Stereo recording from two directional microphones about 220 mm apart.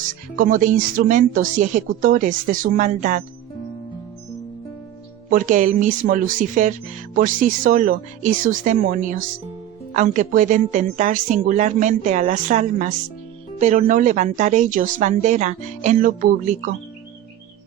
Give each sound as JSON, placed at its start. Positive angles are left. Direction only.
{"t": 0.1, "sound": "speech", "side_deg": -35}
{"t": 5.3, "sound": "speech", "side_deg": -35}